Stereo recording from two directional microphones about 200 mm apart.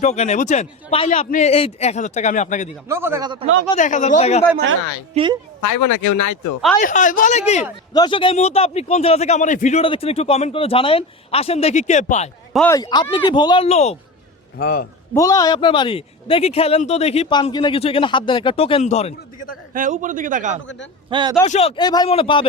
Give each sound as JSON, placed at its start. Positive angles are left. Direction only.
{"t": 0.0, "sound": "a man's voice", "side_deg": 35}
{"t": 2.9, "sound": "a man's voice", "side_deg": -15}
{"t": 3.7, "sound": "a man's voice", "side_deg": 40}
{"t": 4.5, "sound": "speech", "side_deg": -65}
{"t": 5.1, "sound": "a man's voice", "side_deg": -25}
{"t": 6.7, "sound": "a man's voice", "side_deg": 40}
{"t": 7.9, "sound": "a man's voice", "side_deg": 25}
{"t": 12.5, "sound": "speech", "side_deg": 15}
{"t": 14.6, "sound": "a man's voice", "side_deg": 45}
{"t": 15.1, "sound": "speech", "side_deg": 15}
{"t": 19.7, "sound": "a man's voice", "side_deg": -40}
{"t": 21.1, "sound": "a man's voice", "side_deg": -25}
{"t": 21.4, "sound": "speech", "side_deg": 30}